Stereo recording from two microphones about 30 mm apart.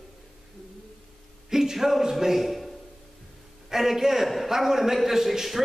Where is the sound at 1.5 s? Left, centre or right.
Centre.